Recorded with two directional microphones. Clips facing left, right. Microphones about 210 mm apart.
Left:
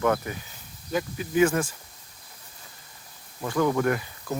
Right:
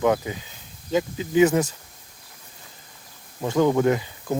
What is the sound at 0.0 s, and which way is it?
Speech, 20° right (ahead or behind).